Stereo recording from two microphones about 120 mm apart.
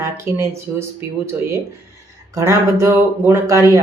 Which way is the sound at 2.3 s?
25° right (ahead or behind).